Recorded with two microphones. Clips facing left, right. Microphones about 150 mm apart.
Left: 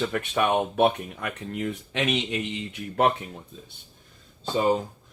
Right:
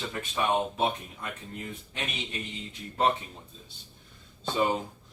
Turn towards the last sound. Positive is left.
turn(degrees=35)  # may be behind; listen again after turning